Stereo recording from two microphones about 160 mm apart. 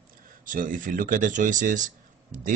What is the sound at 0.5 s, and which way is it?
Speech, 55° right (ahead or behind).